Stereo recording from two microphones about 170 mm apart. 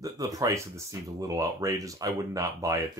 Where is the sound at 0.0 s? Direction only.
20° right (ahead or behind).